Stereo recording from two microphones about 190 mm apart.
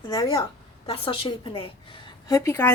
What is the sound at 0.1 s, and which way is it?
A woman's voice, 20° left (ahead or behind).